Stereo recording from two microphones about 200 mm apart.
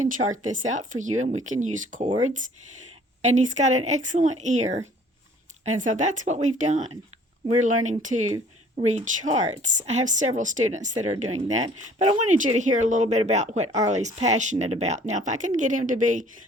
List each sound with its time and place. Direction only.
0.0 s speech: 40° right (ahead or behind)
3.2 s speech: 35° right (ahead or behind)